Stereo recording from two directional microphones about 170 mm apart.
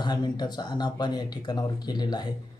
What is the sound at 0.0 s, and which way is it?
Speech, 25° left (ahead or behind).